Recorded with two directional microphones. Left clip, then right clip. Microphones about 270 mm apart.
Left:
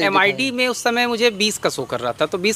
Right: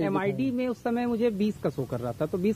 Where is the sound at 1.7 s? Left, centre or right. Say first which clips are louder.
Left 10 dB; left.